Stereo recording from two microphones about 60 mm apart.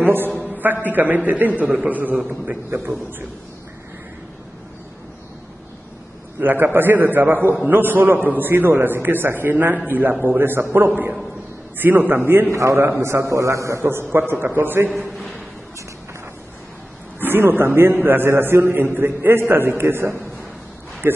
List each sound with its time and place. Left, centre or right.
0.0 s a man's voice: right
0.4 s a sound: right
0.8 s a man's voice: right
2.7 s a man's voice: right
6.4 s a man's voice: right
12.5 s a man's voice: right
14.4 s a man's voice: right
17.2 s a man's voice: right